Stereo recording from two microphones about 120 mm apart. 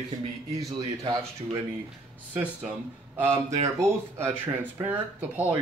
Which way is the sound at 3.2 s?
20° right (ahead or behind).